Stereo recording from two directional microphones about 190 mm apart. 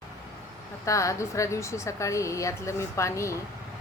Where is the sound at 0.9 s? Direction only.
15° left (ahead or behind).